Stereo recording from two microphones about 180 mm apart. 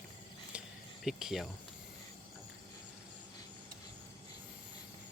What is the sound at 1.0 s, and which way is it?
Speech, centre (ahead or behind).